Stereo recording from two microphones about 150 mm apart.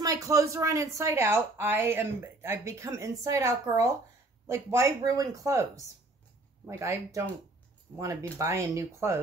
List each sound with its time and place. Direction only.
0.0 s a woman's voice: 25° right (ahead or behind)